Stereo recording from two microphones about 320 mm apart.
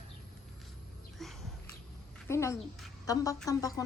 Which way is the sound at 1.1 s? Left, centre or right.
Centre.